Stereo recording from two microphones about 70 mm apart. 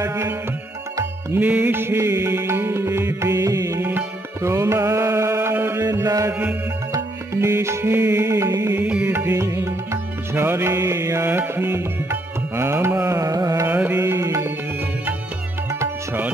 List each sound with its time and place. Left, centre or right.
0.0 s music: right
1.4 s music: right
1.8 s music: right
4.6 s carnatic music: right
5.9 s music: right
7.3 s music: right
8.5 s music: right
8.8 s music: centre
9.1 s music: right
13.1 s carnatic music: right
13.7 s music: right